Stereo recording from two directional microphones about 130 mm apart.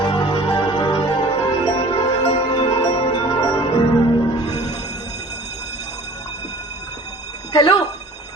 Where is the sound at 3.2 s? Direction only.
30° left (ahead or behind).